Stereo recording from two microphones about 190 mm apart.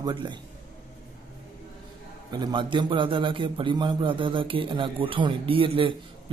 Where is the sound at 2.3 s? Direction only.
20° right (ahead or behind).